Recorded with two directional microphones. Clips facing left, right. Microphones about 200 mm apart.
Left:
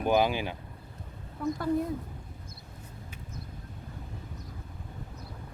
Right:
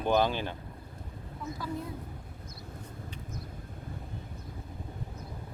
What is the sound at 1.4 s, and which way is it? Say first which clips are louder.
Speech: left 9 dB; 55° left (ahead or behind).